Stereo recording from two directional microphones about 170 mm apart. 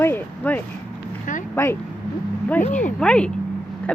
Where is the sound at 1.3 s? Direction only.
50° left (ahead or behind).